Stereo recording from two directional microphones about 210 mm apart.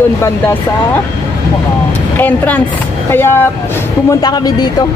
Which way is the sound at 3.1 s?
10° left (ahead or behind).